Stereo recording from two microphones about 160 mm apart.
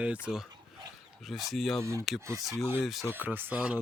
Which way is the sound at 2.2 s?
15° right (ahead or behind).